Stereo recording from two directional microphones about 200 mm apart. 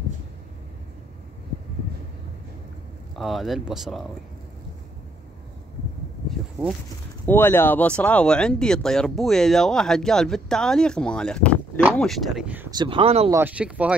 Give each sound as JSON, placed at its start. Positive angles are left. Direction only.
{"t": 3.2, "sound": "speech", "side_deg": 0}
{"t": 7.2, "sound": "speech", "side_deg": 10}
{"t": 12.7, "sound": "speech", "side_deg": -25}
{"t": 13.3, "sound": "speech", "side_deg": -10}